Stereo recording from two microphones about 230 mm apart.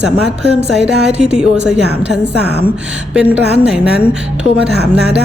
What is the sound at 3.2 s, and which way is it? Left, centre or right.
Speech, centre.